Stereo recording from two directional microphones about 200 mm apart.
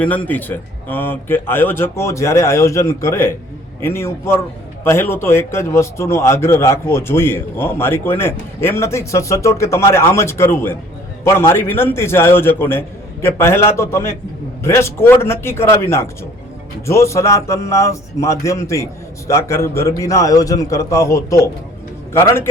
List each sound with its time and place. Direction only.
0.0 s a man's voice: 5° left (ahead or behind)